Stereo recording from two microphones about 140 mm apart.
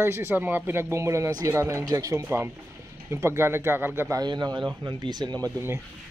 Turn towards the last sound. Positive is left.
turn(degrees=-20)  # may be behind; listen again after turning